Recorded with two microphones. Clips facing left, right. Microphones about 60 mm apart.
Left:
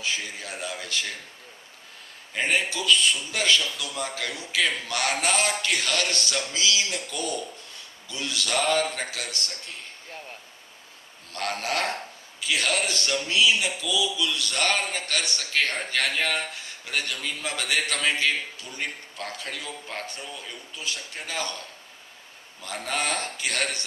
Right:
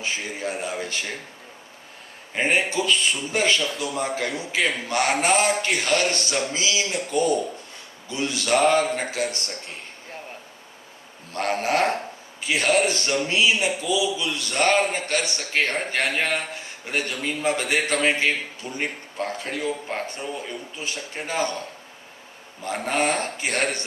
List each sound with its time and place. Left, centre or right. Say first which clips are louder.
0.0 s speech: right 3 dB; right
2.3 s speech: right 4 dB; right
11.3 s speech: right 6 dB; right
22.6 s speech: right 6 dB; right